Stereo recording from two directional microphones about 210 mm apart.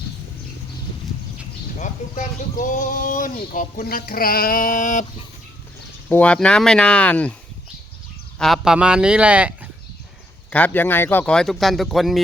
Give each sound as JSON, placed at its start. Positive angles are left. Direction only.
{"t": 1.8, "sound": "speech", "side_deg": 40}
{"t": 6.1, "sound": "speech", "side_deg": 5}
{"t": 8.4, "sound": "speech", "side_deg": 0}
{"t": 10.5, "sound": "speech", "side_deg": 5}